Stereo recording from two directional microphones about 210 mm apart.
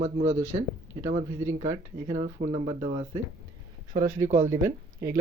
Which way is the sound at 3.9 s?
15° right (ahead or behind).